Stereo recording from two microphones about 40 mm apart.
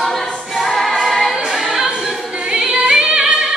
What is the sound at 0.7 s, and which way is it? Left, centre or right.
Choir, centre.